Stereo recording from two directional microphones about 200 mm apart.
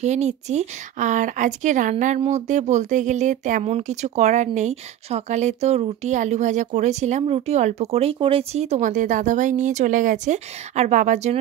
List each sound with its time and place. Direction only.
0.0 s speech: 35° right (ahead or behind)